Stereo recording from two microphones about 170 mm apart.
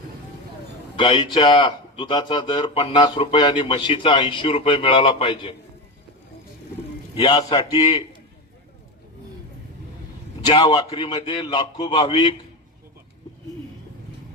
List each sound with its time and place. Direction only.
0.9 s speech: 30° left (ahead or behind)
7.2 s speech: 25° left (ahead or behind)
10.4 s speech: 25° left (ahead or behind)